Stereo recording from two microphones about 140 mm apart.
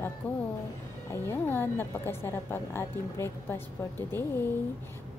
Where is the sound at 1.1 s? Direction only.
15° left (ahead or behind).